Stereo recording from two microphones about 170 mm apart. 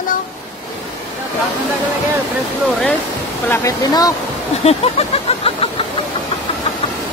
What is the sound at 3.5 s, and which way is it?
Speech, 15° left (ahead or behind).